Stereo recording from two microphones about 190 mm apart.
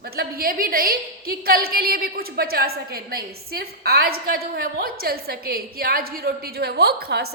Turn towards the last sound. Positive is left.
turn(degrees=-55)  # may be behind; listen again after turning